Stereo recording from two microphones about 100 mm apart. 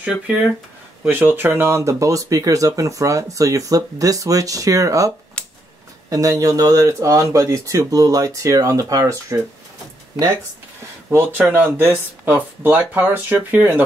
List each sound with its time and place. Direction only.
0.0 s speech: 10° right (ahead or behind)
1.1 s speech: 20° right (ahead or behind)
5.4 s a sound: 10° left (ahead or behind)
6.0 s speech: 35° right (ahead or behind)
11.1 s speech: 25° right (ahead or behind)